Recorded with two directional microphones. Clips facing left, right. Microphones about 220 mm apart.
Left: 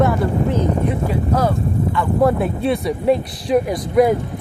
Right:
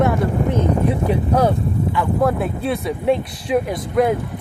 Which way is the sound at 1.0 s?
15° right (ahead or behind).